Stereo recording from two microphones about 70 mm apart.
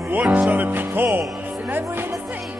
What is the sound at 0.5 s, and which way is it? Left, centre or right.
Music, right.